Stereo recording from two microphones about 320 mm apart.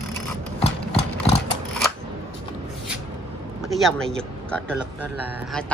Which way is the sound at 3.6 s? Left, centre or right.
Centre.